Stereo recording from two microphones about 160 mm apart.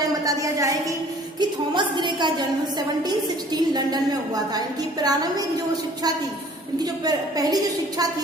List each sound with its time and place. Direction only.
0.3 s a woman's voice: 20° right (ahead or behind)
7.0 s a woman's voice: 25° right (ahead or behind)